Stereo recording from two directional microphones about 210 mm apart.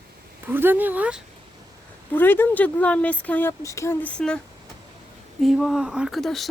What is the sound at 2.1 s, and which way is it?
Speech, 10° left (ahead or behind).